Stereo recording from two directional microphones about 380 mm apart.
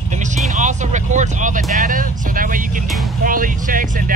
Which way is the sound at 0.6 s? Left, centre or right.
Centre.